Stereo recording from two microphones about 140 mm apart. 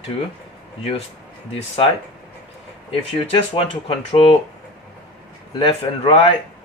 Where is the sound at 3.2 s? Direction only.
40° left (ahead or behind).